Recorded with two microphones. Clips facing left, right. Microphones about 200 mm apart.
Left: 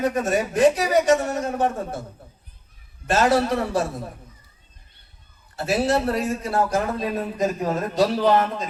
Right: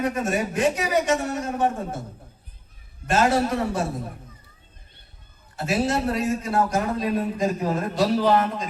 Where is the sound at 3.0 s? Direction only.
35° left (ahead or behind).